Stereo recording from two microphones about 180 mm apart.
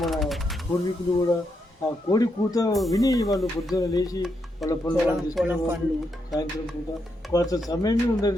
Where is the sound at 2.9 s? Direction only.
20° left (ahead or behind).